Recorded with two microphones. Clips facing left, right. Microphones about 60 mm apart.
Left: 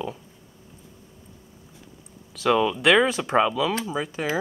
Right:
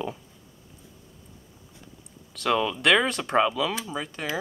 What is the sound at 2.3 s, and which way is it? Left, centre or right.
Speech, centre.